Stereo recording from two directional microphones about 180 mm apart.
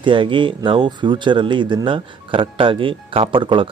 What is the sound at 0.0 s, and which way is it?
Speech, 25° right (ahead or behind).